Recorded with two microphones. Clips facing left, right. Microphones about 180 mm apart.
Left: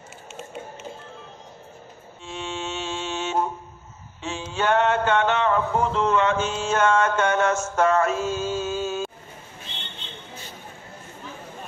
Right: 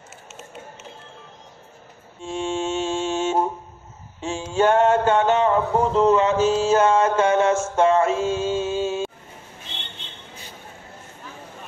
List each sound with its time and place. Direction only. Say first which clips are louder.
2.2 s mantra: right 7 dB; 45° right (ahead or behind)
4.2 s a sound: right 6 dB; 45° right (ahead or behind); by 7.6 s 30° right (ahead or behind)
7.7 s mantra: right 2 dB; 30° right (ahead or behind)